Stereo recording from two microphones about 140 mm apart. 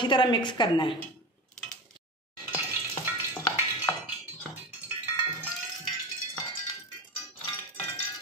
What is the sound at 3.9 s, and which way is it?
Music, 15° left (ahead or behind).